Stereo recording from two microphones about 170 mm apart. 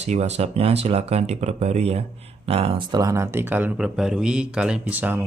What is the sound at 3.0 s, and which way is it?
Speech, 15° right (ahead or behind).